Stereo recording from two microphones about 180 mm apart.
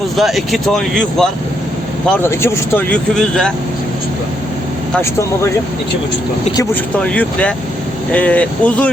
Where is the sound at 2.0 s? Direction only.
15° left (ahead or behind).